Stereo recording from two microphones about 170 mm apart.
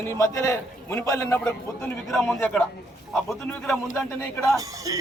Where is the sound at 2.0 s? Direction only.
Centre (ahead or behind).